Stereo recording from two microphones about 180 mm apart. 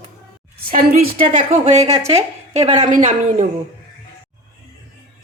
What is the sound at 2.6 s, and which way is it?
Speech, 25° right (ahead or behind).